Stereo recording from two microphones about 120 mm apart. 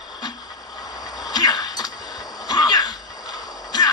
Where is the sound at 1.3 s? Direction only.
35° left (ahead or behind).